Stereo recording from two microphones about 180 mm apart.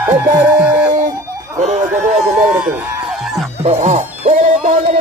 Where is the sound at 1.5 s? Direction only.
45° right (ahead or behind).